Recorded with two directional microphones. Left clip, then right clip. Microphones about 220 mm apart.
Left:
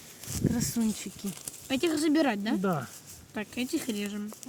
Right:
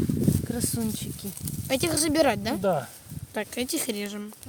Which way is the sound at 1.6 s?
60° right (ahead or behind).